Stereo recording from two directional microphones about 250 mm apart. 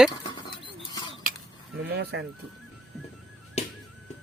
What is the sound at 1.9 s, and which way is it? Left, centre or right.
Chicken, right.